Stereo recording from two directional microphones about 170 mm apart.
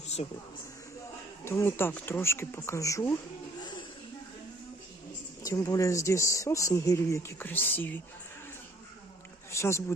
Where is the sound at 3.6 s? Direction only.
25° left (ahead or behind).